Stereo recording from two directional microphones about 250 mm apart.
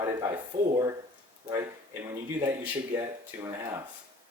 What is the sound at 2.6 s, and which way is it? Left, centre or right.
Speech, centre.